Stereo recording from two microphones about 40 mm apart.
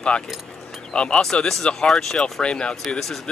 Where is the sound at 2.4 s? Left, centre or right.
Left.